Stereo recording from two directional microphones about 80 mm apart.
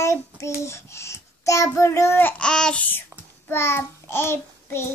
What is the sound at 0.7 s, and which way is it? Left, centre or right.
A child's voice, left.